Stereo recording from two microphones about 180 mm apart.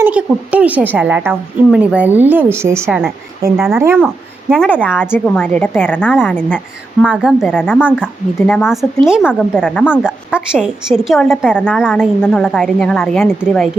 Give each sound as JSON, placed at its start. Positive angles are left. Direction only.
{"t": 0.0, "sound": "a woman's voice", "side_deg": -5}
{"t": 4.0, "sound": "a woman's voice", "side_deg": 5}
{"t": 7.1, "sound": "a woman's voice", "side_deg": -5}
{"t": 8.4, "sound": "a woman's voice", "side_deg": 10}
{"t": 8.7, "sound": "a woman's voice", "side_deg": 0}
{"t": 10.0, "sound": "a woman's voice", "side_deg": -5}